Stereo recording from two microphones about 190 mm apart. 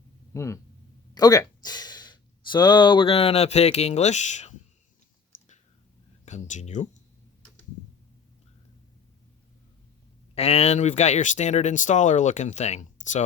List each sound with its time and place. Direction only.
0.3 s speech: 15° left (ahead or behind); by 4.5 s 40° left (ahead or behind)
6.2 s speech: 40° left (ahead or behind)
10.3 s speech: 35° left (ahead or behind)